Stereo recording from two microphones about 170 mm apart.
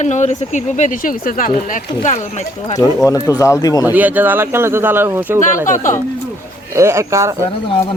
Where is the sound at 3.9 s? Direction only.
10° right (ahead or behind).